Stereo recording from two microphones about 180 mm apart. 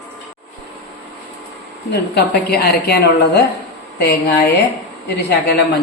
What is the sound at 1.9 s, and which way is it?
A woman's voice, 65° left (ahead or behind).